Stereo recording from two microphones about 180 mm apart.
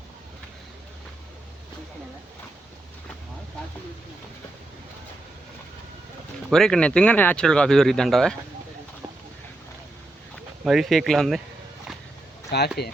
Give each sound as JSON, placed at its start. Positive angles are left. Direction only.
{"t": 6.5, "sound": "speech", "side_deg": 5}
{"t": 10.6, "sound": "speech", "side_deg": 0}
{"t": 12.5, "sound": "speech", "side_deg": 65}